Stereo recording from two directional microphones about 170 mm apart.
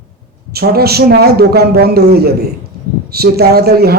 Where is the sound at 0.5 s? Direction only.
65° right (ahead or behind).